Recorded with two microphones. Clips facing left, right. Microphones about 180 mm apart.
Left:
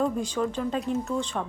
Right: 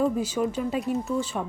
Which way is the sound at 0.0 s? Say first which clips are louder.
Right 2 dB; 5° right (ahead or behind).